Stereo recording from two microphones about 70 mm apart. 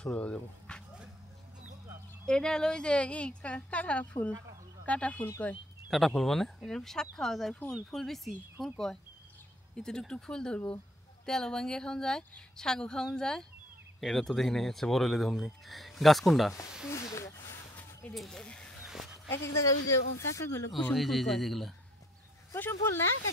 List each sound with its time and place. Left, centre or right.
0.0 s speech: centre
2.2 s speech: centre
5.9 s speech: centre
16.9 s speech: left
18.1 s speech: centre
18.4 s speech: centre
19.2 s speech: left
20.9 s speech: centre
22.7 s speech: left